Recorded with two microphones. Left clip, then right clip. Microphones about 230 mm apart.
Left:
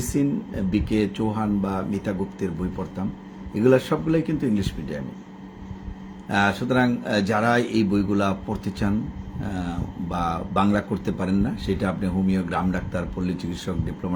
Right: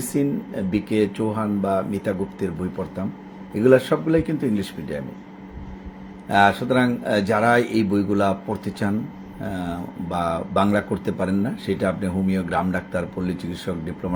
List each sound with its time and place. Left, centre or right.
0.0 s speech: centre
3.5 s speech: centre
6.2 s speech: centre